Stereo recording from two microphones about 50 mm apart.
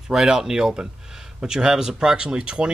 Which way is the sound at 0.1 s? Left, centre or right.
Centre.